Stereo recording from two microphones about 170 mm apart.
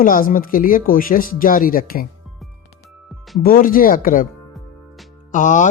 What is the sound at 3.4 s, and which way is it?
Speech, 55° left (ahead or behind).